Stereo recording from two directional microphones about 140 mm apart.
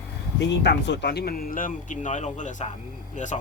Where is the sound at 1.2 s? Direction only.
90° left.